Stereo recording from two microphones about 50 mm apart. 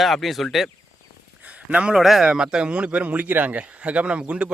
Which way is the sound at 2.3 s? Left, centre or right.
Centre.